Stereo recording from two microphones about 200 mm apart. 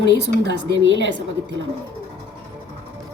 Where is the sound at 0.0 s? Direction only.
60° right (ahead or behind).